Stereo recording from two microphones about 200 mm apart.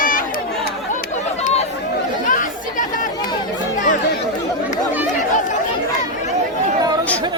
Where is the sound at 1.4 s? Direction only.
30° left (ahead or behind).